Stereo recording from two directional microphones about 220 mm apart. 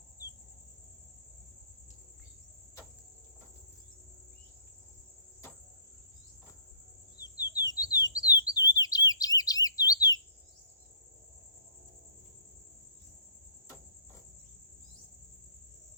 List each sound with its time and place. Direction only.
7.2 s bird: 15° left (ahead or behind)
8.4 s chirp: 15° left (ahead or behind)